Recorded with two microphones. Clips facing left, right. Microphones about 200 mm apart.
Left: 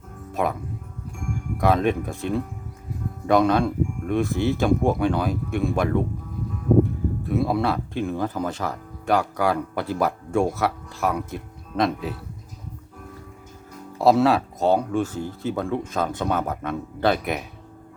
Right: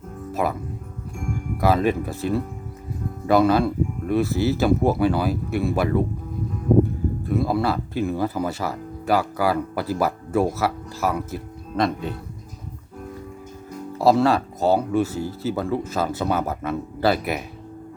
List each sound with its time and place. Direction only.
0.3 s music: 5° right (ahead or behind)
1.6 s speech: 5° right (ahead or behind)
7.3 s speech: centre (ahead or behind)
14.0 s speech: centre (ahead or behind)